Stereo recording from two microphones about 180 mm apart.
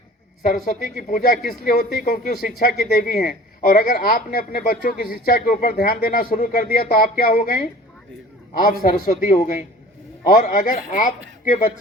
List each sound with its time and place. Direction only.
0.4 s a man's voice: 50° left (ahead or behind)